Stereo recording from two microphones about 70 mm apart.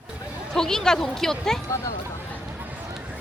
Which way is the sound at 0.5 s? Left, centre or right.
Centre.